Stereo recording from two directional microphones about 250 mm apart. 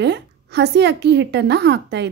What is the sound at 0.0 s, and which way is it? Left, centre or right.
A woman's voice, right.